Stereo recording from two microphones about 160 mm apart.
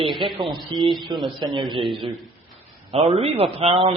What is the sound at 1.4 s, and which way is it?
Speech, 25° right (ahead or behind).